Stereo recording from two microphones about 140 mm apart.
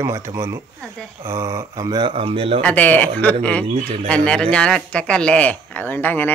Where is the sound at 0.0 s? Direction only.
20° right (ahead or behind); by 2.6 s 40° right (ahead or behind).